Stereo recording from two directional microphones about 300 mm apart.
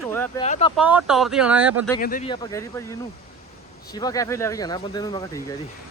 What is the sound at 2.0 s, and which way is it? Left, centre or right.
Speech, left.